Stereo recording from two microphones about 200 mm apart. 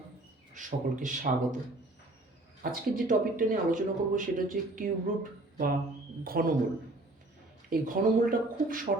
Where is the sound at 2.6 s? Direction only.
45° right (ahead or behind).